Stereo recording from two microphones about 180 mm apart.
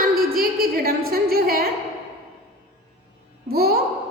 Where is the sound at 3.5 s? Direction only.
60° right (ahead or behind).